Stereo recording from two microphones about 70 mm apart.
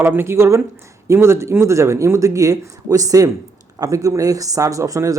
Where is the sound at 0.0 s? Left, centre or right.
Right.